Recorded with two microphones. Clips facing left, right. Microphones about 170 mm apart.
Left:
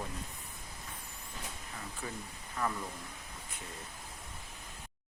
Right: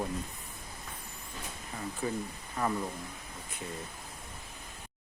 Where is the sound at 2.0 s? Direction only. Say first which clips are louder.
Right 11 dB; 25° right (ahead or behind).